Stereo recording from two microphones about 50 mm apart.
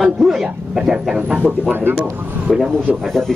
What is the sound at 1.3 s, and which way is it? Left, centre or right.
Speech, right.